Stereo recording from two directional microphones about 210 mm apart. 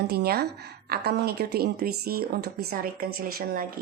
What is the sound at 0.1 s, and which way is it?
A woman's voice, 50° right (ahead or behind).